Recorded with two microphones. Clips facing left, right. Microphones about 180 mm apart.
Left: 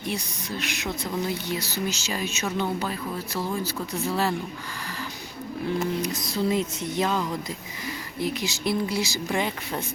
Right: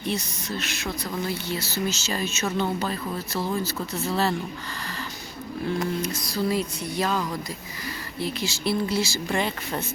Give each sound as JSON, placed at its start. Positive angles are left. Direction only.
{"t": 0.1, "sound": "speech", "side_deg": 15}
{"t": 5.8, "sound": "music", "side_deg": 15}
{"t": 8.2, "sound": "speech", "side_deg": 15}